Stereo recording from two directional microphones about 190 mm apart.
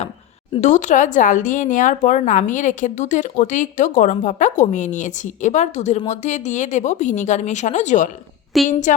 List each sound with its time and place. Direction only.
0.6 s a woman's voice: 40° left (ahead or behind)
8.5 s a woman's voice: centre (ahead or behind)